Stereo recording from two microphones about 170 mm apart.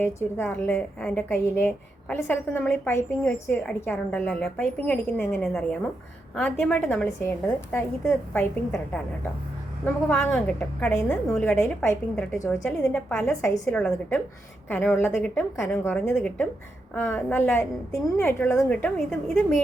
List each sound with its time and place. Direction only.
0.6 s a woman's voice: 5° left (ahead or behind)
12.4 s a woman's voice: 20° left (ahead or behind)
12.6 s a woman's voice: 10° left (ahead or behind)
13.7 s a woman's voice: 5° left (ahead or behind)